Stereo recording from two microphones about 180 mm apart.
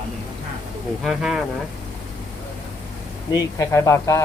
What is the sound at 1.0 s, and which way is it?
Speech, centre (ahead or behind).